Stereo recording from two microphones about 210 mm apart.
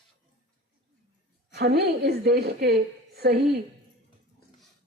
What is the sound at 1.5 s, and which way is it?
A woman's voice, 50° right (ahead or behind).